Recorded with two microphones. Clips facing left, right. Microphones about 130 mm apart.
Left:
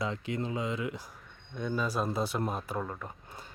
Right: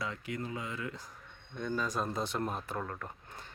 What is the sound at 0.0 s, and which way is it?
Speech, 25° left (ahead or behind).